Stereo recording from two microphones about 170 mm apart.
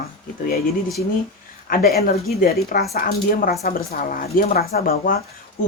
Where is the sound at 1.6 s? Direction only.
60° left (ahead or behind).